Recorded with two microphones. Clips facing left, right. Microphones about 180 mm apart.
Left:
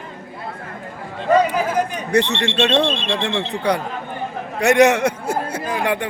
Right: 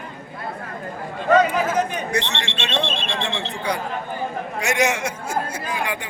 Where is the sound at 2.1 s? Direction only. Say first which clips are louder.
Left 7 dB; 60° left (ahead or behind).